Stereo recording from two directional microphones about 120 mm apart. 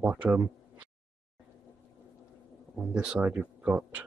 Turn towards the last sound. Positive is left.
turn(degrees=-10)  # may be behind; listen again after turning